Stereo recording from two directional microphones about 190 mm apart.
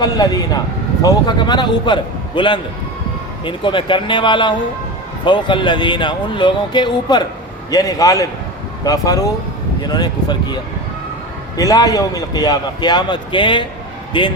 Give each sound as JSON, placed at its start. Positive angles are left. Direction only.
{"t": 0.0, "sound": "a man's voice", "side_deg": 20}